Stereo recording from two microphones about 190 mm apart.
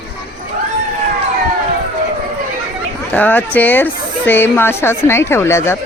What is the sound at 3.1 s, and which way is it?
Speech, 10° left (ahead or behind).